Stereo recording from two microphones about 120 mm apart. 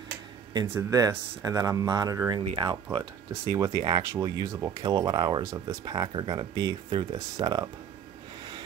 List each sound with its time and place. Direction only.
0.7 s speech: 30° right (ahead or behind)
4.8 s speech: 35° right (ahead or behind)